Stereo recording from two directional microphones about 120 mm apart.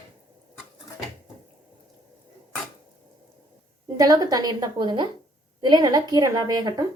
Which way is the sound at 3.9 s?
30° right (ahead or behind).